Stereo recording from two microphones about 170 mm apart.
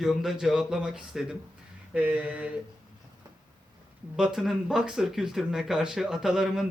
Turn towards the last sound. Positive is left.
turn(degrees=0)  # may be behind; listen again after turning